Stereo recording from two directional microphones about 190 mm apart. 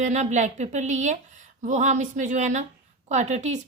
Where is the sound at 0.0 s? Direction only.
40° right (ahead or behind).